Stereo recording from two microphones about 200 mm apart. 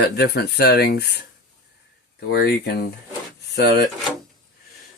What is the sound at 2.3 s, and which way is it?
Speech, 50° left (ahead or behind).